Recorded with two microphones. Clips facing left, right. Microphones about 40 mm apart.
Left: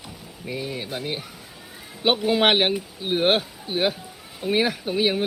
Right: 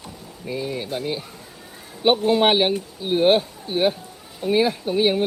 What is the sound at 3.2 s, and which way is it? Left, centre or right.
Speech, left.